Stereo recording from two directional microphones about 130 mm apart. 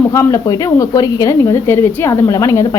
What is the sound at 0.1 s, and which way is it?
A woman's voice, 20° left (ahead or behind).